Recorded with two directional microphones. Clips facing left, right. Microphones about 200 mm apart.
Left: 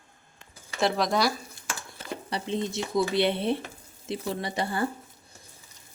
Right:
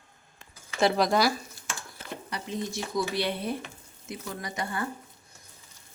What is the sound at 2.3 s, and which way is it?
Speech, 25° left (ahead or behind).